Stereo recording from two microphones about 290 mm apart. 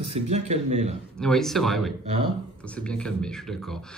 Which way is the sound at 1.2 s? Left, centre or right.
Centre.